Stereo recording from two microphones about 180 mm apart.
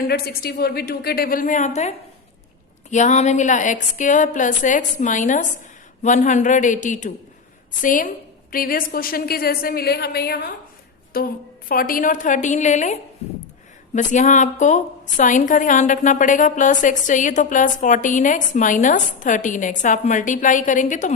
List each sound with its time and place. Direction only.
0.1 s a woman's voice: 60° left (ahead or behind); by 21.1 s 45° left (ahead or behind)